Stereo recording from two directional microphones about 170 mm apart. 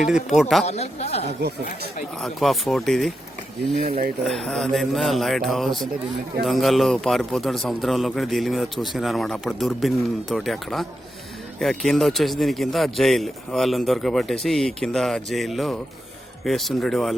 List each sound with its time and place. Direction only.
0.1 s a man's voice: centre (ahead or behind)
0.6 s speech: 40° left (ahead or behind)
1.4 s speech: 80° right
2.2 s a man's voice: centre (ahead or behind)
4.3 s a man's voice: centre (ahead or behind)